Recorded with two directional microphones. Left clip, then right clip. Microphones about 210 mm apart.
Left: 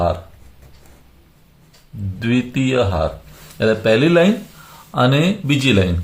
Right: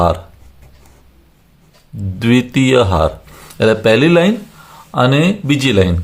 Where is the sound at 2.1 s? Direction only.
45° right (ahead or behind).